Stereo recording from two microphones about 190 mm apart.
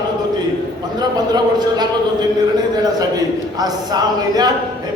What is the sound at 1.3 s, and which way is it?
Speech, 20° right (ahead or behind).